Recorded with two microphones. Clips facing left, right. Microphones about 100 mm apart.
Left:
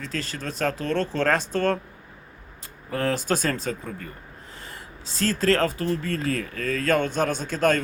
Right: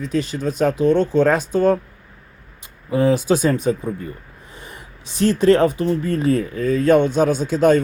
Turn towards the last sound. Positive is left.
turn(degrees=-10)  # may be behind; listen again after turning